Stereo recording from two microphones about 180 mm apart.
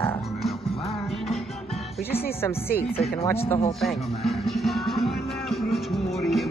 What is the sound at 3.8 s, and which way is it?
Music, centre (ahead or behind).